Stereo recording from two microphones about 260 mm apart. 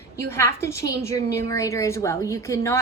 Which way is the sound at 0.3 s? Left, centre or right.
Centre.